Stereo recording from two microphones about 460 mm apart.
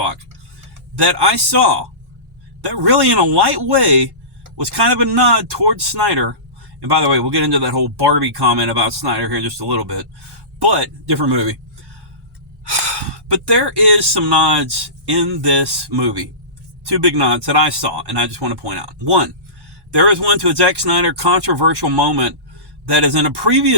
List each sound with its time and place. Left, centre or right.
0.9 s speech: right
13.1 s speech: right